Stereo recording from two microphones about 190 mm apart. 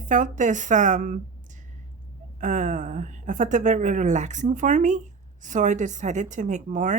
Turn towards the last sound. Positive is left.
turn(degrees=-40)  # may be behind; listen again after turning